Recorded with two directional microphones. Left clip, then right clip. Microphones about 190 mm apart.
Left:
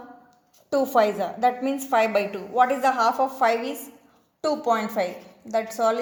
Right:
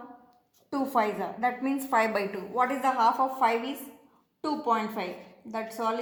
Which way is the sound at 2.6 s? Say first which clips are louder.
Left 5 dB; 40° left (ahead or behind).